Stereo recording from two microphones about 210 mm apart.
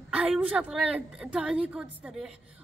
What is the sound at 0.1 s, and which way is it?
A woman's voice, 5° right (ahead or behind).